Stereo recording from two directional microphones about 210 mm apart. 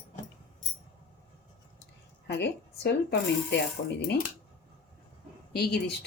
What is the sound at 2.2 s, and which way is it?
Speech, 55° left (ahead or behind).